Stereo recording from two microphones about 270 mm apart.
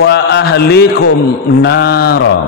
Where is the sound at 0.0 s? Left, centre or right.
Left.